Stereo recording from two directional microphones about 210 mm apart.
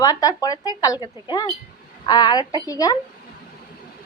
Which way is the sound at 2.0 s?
20° left (ahead or behind).